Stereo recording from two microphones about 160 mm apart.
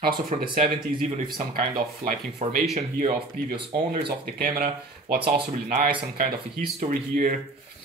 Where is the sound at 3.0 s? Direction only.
30° right (ahead or behind).